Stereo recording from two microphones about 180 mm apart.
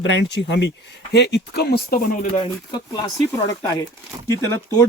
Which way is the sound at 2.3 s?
30° left (ahead or behind).